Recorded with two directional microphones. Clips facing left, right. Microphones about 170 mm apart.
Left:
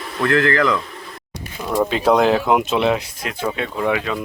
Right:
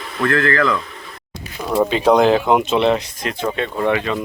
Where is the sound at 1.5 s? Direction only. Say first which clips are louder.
Right 2 dB; centre (ahead or behind).